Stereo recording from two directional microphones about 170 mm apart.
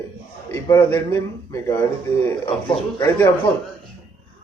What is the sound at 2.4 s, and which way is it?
Speech, 30° left (ahead or behind).